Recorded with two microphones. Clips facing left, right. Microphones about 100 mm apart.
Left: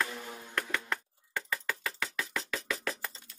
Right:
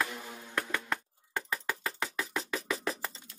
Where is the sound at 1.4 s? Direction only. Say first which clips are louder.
Right 1 dB; 10° right (ahead or behind).